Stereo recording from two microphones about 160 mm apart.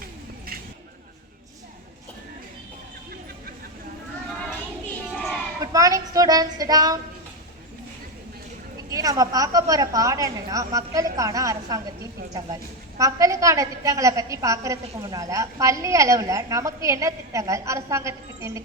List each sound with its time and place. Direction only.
0.0 s a sound: 65° right (ahead or behind)
5.7 s speech: 20° right (ahead or behind)
8.9 s a woman's voice: 20° right (ahead or behind)
13.0 s a woman's voice: 20° right (ahead or behind)